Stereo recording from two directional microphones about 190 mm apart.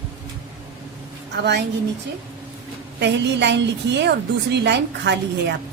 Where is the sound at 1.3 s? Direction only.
60° right (ahead or behind).